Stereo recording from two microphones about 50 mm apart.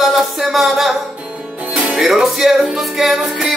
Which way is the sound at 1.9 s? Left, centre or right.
Centre.